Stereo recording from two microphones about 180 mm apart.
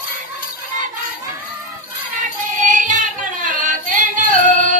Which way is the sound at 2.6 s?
45° right (ahead or behind).